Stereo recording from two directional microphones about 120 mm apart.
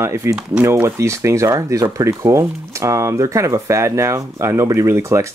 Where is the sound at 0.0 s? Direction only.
25° right (ahead or behind).